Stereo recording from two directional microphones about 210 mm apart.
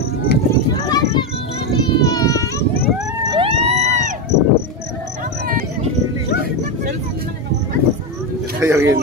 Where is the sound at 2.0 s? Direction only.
15° left (ahead or behind).